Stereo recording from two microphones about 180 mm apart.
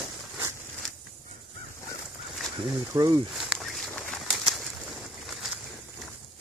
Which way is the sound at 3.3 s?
Centre (ahead or behind).